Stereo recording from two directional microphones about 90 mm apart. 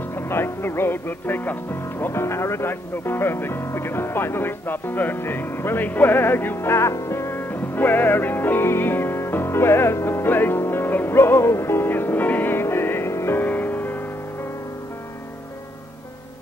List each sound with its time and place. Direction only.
0.1 s speech: 25° left (ahead or behind)